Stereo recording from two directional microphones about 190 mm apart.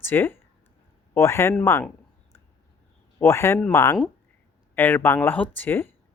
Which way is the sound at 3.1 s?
15° left (ahead or behind).